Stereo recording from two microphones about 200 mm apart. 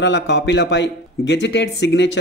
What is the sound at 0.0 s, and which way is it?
Speech, 65° left (ahead or behind).